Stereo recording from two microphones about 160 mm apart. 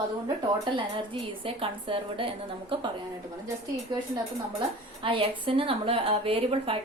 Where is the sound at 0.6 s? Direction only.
30° right (ahead or behind).